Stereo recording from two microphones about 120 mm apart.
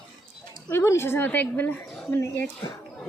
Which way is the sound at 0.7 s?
20° left (ahead or behind).